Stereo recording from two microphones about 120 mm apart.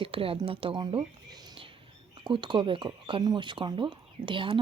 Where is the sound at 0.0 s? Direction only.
50° right (ahead or behind).